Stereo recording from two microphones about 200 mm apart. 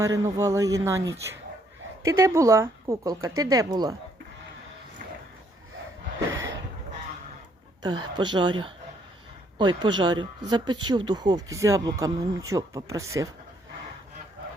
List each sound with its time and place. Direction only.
0.0 s speech: 15° right (ahead or behind)
2.0 s speech: 15° right (ahead or behind)
7.8 s speech: 20° right (ahead or behind)